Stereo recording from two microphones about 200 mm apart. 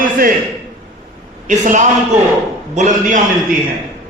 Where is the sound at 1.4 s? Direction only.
40° right (ahead or behind).